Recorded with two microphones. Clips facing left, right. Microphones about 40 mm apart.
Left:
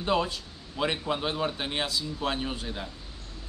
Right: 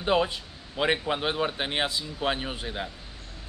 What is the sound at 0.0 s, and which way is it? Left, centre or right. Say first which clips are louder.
A man's voice: right 2 dB; right.